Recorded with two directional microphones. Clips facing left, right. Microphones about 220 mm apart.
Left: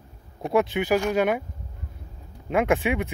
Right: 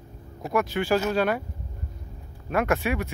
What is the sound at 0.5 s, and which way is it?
Speech, 20° left (ahead or behind).